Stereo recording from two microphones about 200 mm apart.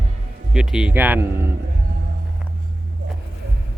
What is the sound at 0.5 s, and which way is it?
Speech, 5° right (ahead or behind).